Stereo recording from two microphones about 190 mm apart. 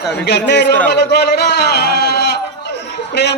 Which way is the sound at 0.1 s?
60° left (ahead or behind).